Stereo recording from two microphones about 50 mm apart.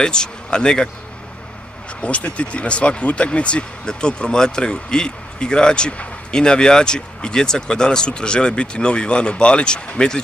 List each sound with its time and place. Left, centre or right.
0.0 s speech: centre
2.0 s speech: left